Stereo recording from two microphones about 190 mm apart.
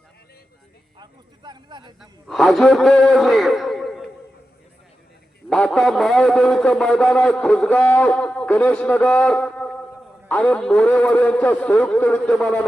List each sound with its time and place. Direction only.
0.9 s speech: 25° right (ahead or behind)
2.0 s a man's voice: centre (ahead or behind)
5.5 s a man's voice: 5° left (ahead or behind)